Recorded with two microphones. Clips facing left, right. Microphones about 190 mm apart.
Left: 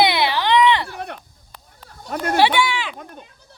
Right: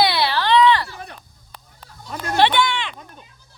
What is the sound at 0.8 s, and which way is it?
Sheep, 65° left (ahead or behind).